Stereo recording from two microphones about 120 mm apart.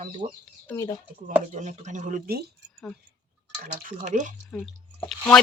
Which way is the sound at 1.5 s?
85° right.